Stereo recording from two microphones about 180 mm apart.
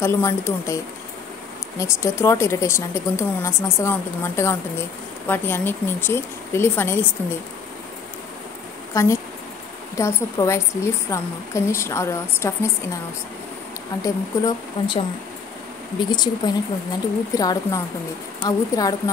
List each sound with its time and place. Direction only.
0.0 s speech: 15° left (ahead or behind)
1.8 s speech: 15° left (ahead or behind)
8.9 s speech: 15° left (ahead or behind)
14.0 s speech: 20° left (ahead or behind)
16.0 s speech: 25° left (ahead or behind)